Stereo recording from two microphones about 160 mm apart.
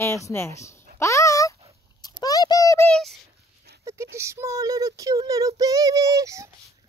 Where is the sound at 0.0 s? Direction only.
20° left (ahead or behind).